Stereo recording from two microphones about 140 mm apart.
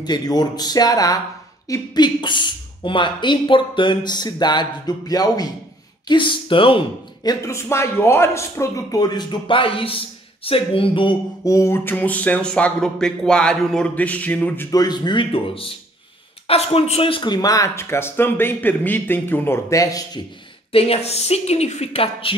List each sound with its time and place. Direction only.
0.0 s speech: 30° left (ahead or behind)
7.2 s speech: 20° left (ahead or behind); by 11.1 s 40° left (ahead or behind)
11.4 s speech: 25° left (ahead or behind)
14.7 s speech: 30° left (ahead or behind)
20.7 s speech: 45° left (ahead or behind)